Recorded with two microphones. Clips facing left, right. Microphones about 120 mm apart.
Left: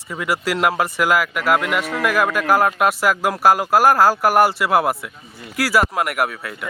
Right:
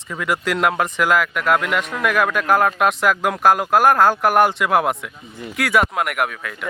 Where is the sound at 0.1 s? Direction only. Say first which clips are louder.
Even; 5° left (ahead or behind).